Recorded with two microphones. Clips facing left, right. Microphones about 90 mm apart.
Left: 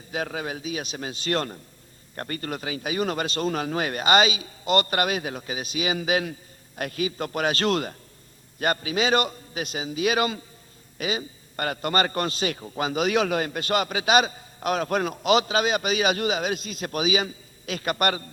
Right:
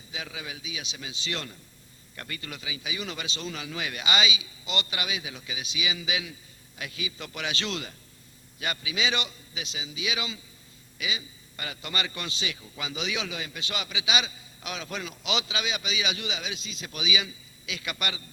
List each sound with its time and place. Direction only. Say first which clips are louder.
0.1 s a man's voice: left 9 dB; 50° left (ahead or behind)